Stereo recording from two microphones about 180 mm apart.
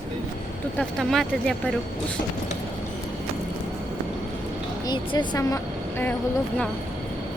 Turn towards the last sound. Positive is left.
turn(degrees=20)  # may be behind; listen again after turning